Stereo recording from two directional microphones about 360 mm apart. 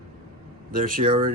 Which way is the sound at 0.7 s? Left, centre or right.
Right.